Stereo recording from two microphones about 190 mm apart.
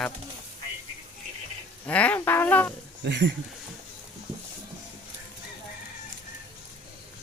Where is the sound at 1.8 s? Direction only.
5° left (ahead or behind).